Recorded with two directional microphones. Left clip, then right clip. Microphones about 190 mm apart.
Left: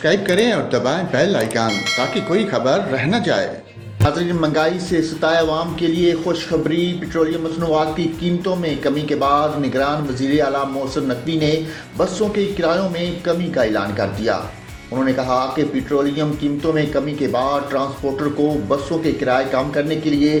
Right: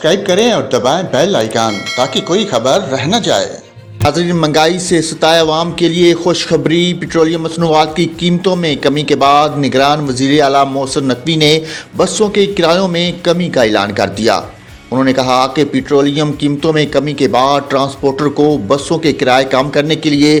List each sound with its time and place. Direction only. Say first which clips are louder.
0.0 s speech: right 5 dB; 30° right (ahead or behind)
4.0 s a man's voice: right 6 dB; 35° right (ahead or behind)